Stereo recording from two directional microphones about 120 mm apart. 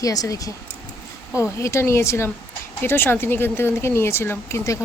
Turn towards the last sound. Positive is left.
turn(degrees=25)  # may be behind; listen again after turning